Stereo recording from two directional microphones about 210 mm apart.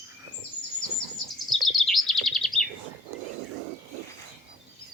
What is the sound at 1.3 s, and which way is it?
Chirp, centre (ahead or behind).